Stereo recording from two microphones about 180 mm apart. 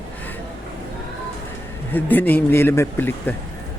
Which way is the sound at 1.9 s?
10° left (ahead or behind).